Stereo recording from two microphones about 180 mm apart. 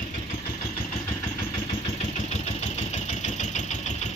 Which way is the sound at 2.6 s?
40° left (ahead or behind).